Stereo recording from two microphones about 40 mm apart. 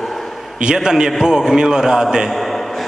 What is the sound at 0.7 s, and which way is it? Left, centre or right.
A man's voice, centre.